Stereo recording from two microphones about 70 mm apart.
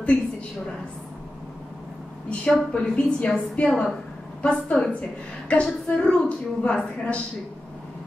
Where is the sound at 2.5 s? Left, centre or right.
Centre.